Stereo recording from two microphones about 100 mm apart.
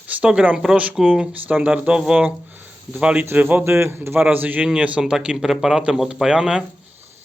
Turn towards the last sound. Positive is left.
turn(degrees=-10)  # may be behind; listen again after turning